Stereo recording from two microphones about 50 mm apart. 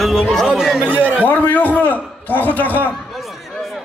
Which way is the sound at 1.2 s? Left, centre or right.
Left.